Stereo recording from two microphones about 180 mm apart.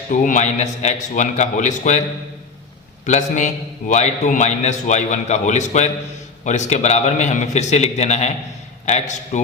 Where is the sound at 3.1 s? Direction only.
40° left (ahead or behind).